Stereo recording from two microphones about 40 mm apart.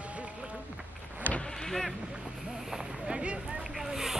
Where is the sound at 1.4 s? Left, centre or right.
Centre.